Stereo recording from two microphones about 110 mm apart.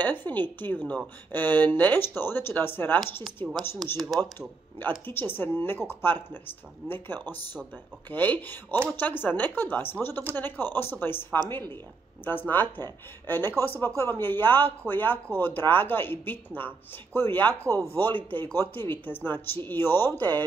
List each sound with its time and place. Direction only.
0.0 s speech: 15° left (ahead or behind)
3.8 s speech: 35° right (ahead or behind)
4.2 s speech: 20° left (ahead or behind)
6.8 s speech: 55° right (ahead or behind)
8.1 s speech: 15° left (ahead or behind)
12.3 s speech: 20° left (ahead or behind)